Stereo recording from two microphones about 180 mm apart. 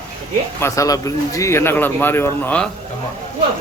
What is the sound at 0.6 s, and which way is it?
A man's voice, 20° left (ahead or behind).